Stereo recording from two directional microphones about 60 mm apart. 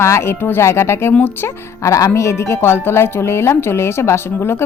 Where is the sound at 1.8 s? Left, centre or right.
Left.